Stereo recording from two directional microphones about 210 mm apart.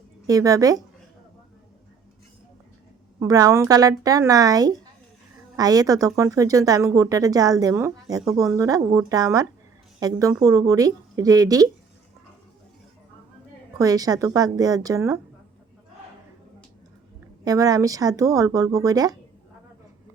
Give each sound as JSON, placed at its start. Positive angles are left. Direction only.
{"t": 0.3, "sound": "speech", "side_deg": -15}
{"t": 3.2, "sound": "speech", "side_deg": -15}
{"t": 13.7, "sound": "speech", "side_deg": -15}
{"t": 17.4, "sound": "speech", "side_deg": -15}